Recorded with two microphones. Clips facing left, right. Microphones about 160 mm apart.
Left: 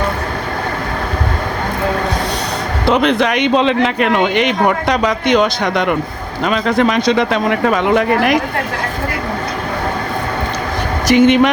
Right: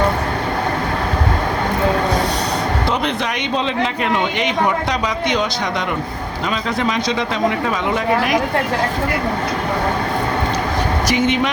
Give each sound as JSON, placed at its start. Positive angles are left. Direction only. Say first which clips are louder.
{"t": 2.9, "sound": "speech", "louder": "left 7 dB", "side_deg": 75}
{"t": 11.1, "sound": "speech", "louder": "left 10 dB", "side_deg": 60}